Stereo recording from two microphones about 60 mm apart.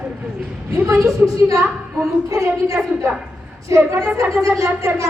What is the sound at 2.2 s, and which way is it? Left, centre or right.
A woman's voice, right.